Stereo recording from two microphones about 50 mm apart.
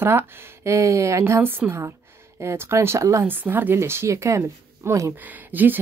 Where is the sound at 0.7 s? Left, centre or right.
Right.